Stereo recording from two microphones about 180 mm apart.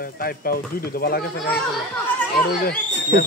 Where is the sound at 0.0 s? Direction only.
55° left (ahead or behind).